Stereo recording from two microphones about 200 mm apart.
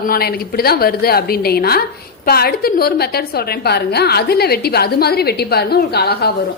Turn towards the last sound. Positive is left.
turn(degrees=50)  # may be behind; listen again after turning